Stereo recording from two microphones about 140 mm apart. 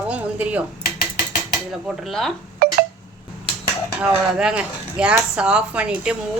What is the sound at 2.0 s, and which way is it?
Speech, 5° left (ahead or behind).